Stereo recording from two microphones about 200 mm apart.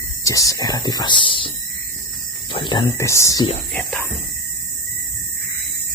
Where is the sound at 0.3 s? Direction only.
15° left (ahead or behind).